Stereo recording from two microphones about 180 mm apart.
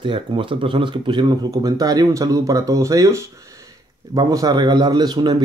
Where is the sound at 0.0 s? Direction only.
30° right (ahead or behind).